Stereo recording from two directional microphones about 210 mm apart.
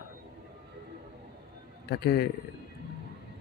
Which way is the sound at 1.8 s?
50° left (ahead or behind).